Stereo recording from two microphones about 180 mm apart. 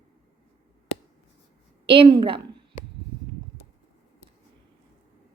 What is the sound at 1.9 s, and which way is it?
Speech, 30° right (ahead or behind).